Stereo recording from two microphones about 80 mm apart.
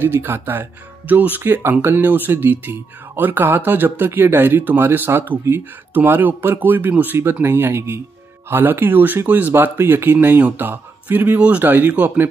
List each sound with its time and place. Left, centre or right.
0.0 s speech: right